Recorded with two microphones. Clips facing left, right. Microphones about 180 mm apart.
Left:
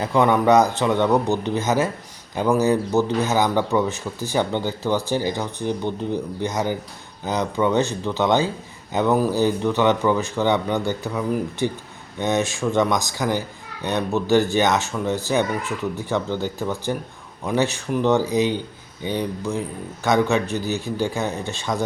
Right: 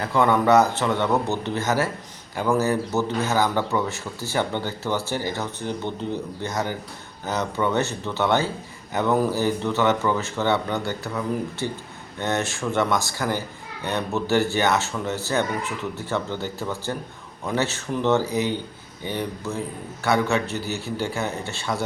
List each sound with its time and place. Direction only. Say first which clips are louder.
0.0 s speech: left 2 dB; 15° left (ahead or behind)